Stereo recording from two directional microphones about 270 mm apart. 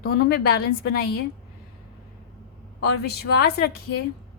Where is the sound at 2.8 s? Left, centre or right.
Left.